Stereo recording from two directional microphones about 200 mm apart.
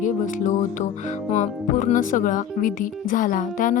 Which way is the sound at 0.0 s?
40° left (ahead or behind).